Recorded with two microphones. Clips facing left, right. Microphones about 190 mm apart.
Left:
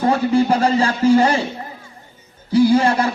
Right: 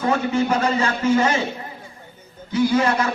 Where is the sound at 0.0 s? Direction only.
35° left (ahead or behind).